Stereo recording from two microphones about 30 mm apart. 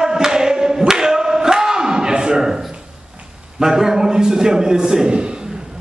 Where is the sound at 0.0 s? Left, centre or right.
Centre.